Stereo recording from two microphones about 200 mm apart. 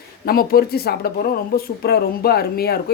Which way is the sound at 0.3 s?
50° left (ahead or behind).